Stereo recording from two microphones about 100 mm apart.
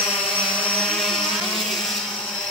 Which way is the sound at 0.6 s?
10° left (ahead or behind).